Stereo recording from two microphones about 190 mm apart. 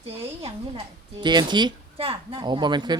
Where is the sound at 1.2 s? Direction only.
25° right (ahead or behind).